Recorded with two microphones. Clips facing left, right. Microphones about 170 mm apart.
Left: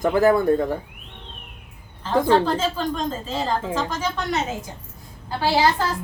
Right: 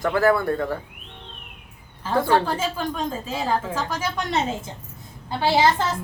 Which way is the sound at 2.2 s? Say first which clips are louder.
Left 3 dB; 10° right (ahead or behind).